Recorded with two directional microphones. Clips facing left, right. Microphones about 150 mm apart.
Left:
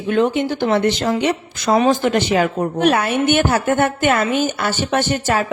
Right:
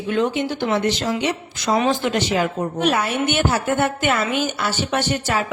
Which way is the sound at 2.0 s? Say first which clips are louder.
Left 4 dB; 60° left (ahead or behind).